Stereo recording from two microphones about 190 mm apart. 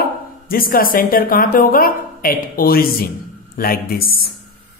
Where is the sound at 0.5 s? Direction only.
50° left (ahead or behind).